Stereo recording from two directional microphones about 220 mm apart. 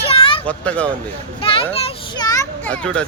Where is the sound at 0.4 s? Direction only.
5° left (ahead or behind).